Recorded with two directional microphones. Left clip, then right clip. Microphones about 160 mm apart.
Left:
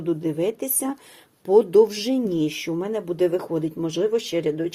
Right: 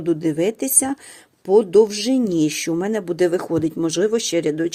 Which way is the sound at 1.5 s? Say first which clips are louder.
Right 2 dB; 15° right (ahead or behind).